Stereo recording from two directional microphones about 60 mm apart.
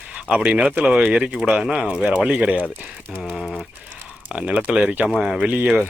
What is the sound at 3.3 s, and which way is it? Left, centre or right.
Speech, centre.